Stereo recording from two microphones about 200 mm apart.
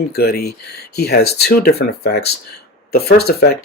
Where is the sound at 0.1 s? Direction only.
55° left (ahead or behind).